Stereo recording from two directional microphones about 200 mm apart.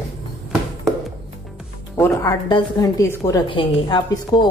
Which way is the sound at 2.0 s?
15° left (ahead or behind).